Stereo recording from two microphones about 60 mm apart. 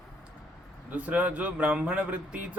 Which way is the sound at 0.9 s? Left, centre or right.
Right.